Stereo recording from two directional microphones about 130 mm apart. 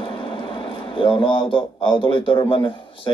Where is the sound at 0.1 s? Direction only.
40° left (ahead or behind).